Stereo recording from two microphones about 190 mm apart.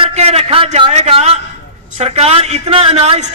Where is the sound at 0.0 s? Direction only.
35° right (ahead or behind).